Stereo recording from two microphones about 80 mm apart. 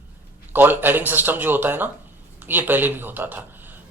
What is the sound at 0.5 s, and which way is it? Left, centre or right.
Speech, right.